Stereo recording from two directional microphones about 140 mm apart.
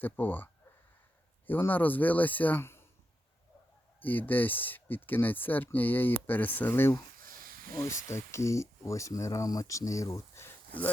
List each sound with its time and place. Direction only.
0.0 s speech: 15° left (ahead or behind)
4.0 s speech: 15° left (ahead or behind)